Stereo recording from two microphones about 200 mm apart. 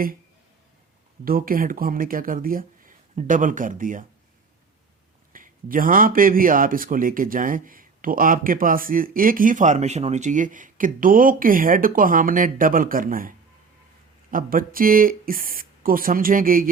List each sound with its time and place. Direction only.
1.2 s a man's voice: 45° right (ahead or behind)
5.3 s a man's voice: 45° right (ahead or behind)